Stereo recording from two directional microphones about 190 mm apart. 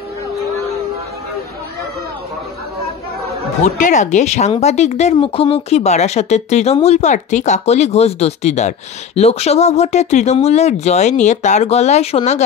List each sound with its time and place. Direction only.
3.6 s speech: 40° left (ahead or behind)